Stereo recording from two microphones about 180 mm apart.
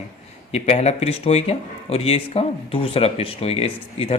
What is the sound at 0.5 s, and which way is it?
Speech, 35° left (ahead or behind).